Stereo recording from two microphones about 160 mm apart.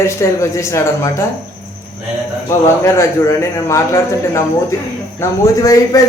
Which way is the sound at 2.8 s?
15° left (ahead or behind).